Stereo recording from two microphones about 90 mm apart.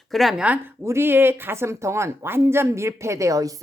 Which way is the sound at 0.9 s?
25° right (ahead or behind).